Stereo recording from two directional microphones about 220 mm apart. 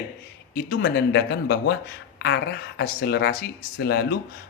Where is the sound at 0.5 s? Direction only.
55° left (ahead or behind).